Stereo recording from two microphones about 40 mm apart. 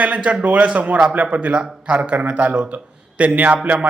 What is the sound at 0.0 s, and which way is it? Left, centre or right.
A man's voice, right.